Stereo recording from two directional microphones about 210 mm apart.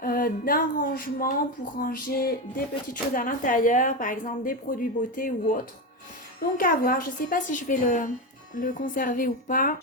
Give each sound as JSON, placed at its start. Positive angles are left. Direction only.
{"t": 0.0, "sound": "a sound", "side_deg": 45}
{"t": 1.8, "sound": "speech", "side_deg": 40}
{"t": 6.6, "sound": "speech", "side_deg": 40}